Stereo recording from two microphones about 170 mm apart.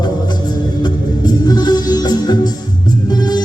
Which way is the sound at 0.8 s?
25° left (ahead or behind).